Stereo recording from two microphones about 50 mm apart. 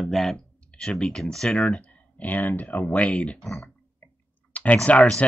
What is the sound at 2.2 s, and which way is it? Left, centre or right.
Speech, left.